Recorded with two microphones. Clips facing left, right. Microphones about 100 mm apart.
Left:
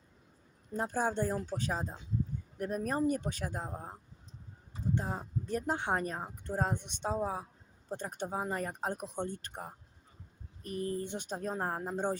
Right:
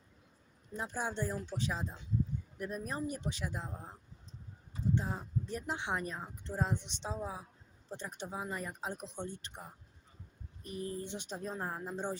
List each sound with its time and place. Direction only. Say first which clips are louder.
0.7 s speech: left 6 dB; 45° left (ahead or behind)
4.9 s speech: left 1 dB; 40° left (ahead or behind)